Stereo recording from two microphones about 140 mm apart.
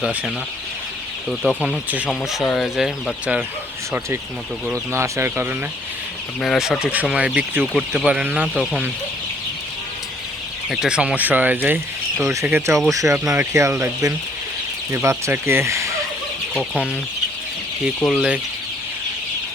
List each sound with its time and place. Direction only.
1.3 s speech: centre (ahead or behind)
4.9 s speech: 20° right (ahead or behind)
6.4 s speech: centre (ahead or behind)
10.7 s speech: 5° right (ahead or behind); by 13.1 s 25° right (ahead or behind)
13.1 s speech: 10° right (ahead or behind)
13.5 s speech: 20° right (ahead or behind)
18.0 s speech: 5° right (ahead or behind)